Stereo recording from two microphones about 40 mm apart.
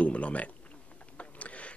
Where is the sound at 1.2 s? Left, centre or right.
Left.